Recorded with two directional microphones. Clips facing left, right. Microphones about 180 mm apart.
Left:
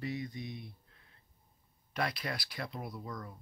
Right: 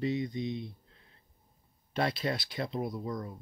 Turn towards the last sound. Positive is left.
turn(degrees=-20)  # may be behind; listen again after turning